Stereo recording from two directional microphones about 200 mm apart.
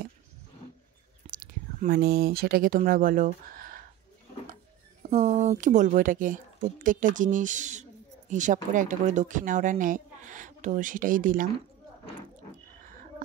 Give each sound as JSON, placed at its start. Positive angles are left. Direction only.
{"t": 1.2, "sound": "speech", "side_deg": -45}
{"t": 5.1, "sound": "speech", "side_deg": -35}